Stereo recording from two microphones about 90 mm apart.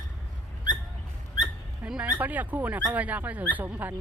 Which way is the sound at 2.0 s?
20° right (ahead or behind).